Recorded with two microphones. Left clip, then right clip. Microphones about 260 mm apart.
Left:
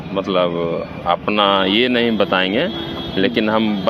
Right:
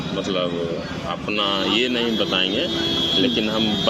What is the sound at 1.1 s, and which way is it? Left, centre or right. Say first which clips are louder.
Speech: left 8 dB; left.